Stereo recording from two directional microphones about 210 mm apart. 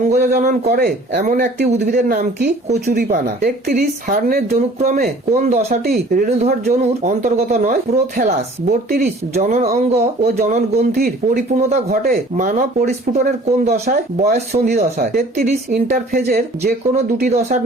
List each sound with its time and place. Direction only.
0.1 s a woman's voice: 40° right (ahead or behind)
1.2 s a woman's voice: 40° right (ahead or behind)
6.4 s speech: 35° right (ahead or behind)
9.3 s a woman's voice: 35° right (ahead or behind)